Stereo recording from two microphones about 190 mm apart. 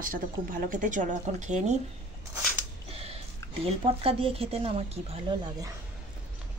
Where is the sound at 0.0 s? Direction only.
45° right (ahead or behind).